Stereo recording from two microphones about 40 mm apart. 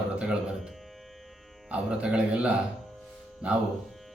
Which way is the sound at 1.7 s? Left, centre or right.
Right.